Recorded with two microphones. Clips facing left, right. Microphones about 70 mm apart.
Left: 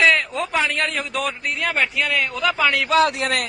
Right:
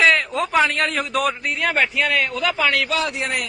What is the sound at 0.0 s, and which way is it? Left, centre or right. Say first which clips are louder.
A man's voice: right 1 dB; centre.